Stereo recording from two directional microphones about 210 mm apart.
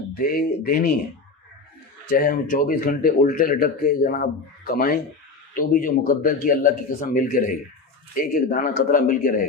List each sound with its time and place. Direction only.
0.2 s speech: 45° left (ahead or behind)
2.0 s speech: 45° left (ahead or behind)